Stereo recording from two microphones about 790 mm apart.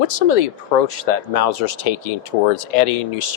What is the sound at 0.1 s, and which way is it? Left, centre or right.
Speech, left.